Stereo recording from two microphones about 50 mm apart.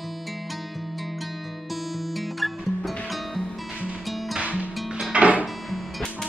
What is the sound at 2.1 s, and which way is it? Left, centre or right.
Music, centre.